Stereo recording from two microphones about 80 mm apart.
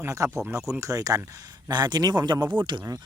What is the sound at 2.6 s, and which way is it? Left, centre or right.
Speech, right.